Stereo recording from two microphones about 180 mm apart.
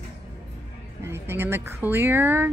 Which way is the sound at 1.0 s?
15° right (ahead or behind).